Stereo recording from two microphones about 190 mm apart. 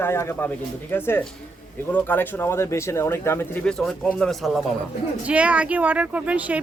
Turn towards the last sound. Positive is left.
turn(degrees=-5)  # may be behind; listen again after turning